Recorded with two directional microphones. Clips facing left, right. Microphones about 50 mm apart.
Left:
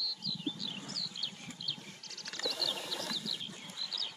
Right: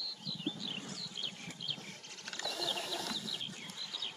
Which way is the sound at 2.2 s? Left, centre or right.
Right.